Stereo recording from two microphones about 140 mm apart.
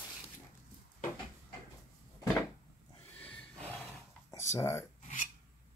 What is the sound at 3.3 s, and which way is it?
Roar, centre (ahead or behind).